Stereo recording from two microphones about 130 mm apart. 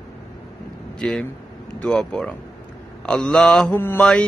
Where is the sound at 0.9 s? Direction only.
5° left (ahead or behind).